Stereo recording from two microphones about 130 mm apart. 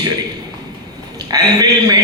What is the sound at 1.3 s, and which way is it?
Speech, 30° right (ahead or behind).